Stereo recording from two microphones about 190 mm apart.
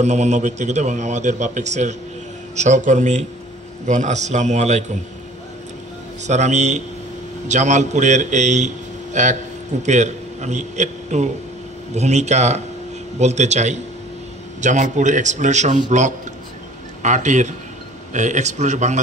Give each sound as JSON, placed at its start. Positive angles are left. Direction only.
{"t": 0.0, "sound": "a man's voice", "side_deg": -35}
{"t": 6.2, "sound": "a man's voice", "side_deg": -35}